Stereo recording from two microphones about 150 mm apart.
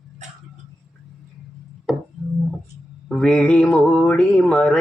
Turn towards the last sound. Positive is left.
turn(degrees=5)  # may be behind; listen again after turning